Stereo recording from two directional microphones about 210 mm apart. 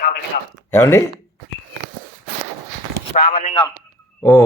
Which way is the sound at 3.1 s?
45° left (ahead or behind).